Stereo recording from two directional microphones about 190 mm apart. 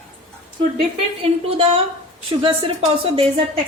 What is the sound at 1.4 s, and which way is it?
A woman's voice, 30° right (ahead or behind).